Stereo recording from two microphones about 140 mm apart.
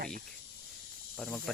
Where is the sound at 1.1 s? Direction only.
5° left (ahead or behind).